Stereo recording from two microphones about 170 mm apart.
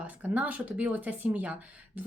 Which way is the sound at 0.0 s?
10° right (ahead or behind).